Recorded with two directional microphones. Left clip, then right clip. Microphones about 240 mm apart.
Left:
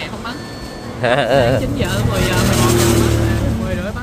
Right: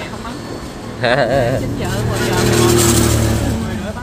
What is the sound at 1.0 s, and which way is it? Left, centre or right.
Speech, centre.